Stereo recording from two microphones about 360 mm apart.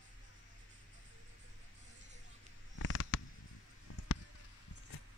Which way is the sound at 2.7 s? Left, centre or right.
Left.